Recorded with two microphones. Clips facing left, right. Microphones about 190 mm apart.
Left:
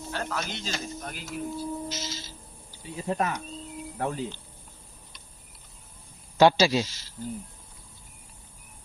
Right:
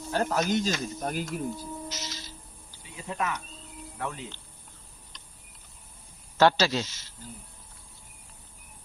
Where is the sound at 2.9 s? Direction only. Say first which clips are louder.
Left 4 dB; 35° left (ahead or behind).